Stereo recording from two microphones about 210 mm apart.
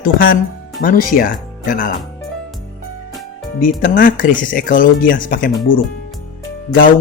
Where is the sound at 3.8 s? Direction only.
40° left (ahead or behind).